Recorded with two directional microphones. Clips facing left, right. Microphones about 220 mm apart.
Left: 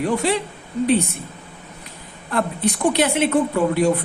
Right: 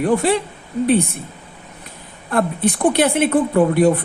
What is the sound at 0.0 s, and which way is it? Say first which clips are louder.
Speech: right 4 dB; 50° right (ahead or behind).